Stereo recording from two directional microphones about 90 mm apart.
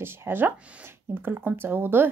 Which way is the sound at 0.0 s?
25° right (ahead or behind).